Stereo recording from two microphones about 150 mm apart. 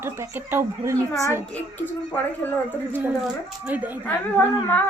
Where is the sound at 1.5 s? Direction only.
10° left (ahead or behind).